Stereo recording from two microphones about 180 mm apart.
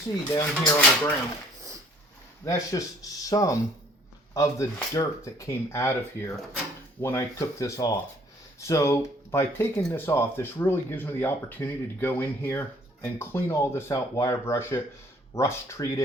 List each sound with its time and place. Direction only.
0.4 s speech: 10° left (ahead or behind)
2.4 s speech: 20° left (ahead or behind)